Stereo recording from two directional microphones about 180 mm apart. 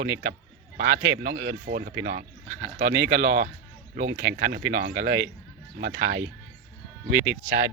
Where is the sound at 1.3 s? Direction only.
65° right (ahead or behind); by 6.2 s 50° right (ahead or behind).